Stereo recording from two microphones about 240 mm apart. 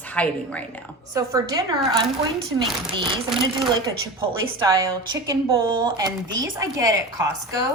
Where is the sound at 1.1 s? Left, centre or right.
Centre.